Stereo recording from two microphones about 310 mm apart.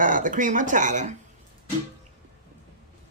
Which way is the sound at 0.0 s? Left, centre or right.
Right.